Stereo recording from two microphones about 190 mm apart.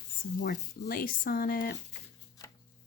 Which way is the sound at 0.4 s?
55° left (ahead or behind).